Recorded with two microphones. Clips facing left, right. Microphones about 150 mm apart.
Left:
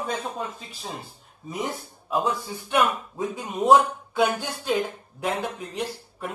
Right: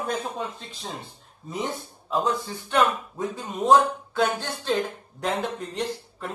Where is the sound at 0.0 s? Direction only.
Centre (ahead or behind).